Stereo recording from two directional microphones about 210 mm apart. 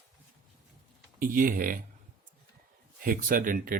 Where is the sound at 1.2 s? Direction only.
40° right (ahead or behind).